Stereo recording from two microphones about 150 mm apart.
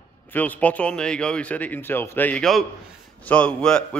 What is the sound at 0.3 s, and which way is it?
A man's voice, 10° left (ahead or behind).